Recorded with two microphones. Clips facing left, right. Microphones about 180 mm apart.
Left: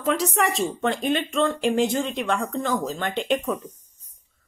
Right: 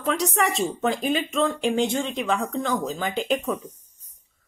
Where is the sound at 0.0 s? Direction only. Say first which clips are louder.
Left 1 dB; centre (ahead or behind).